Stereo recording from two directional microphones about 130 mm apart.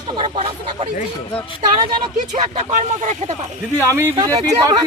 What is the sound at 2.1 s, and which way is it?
Speech, 70° right (ahead or behind).